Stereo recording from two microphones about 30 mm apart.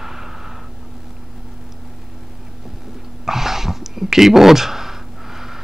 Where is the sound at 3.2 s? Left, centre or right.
Centre.